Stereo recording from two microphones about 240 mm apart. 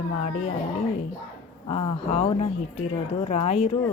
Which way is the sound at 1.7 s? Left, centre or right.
Left.